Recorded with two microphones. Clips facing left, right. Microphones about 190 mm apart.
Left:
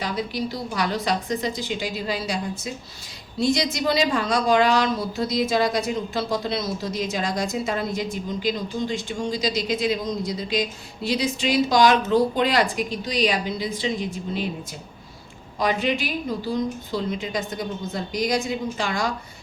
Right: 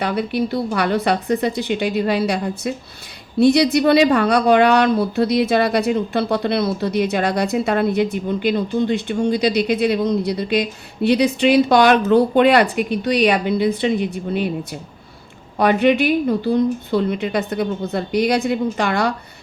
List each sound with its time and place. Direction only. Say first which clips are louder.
0.0 s speech: right 7 dB; 60° right (ahead or behind)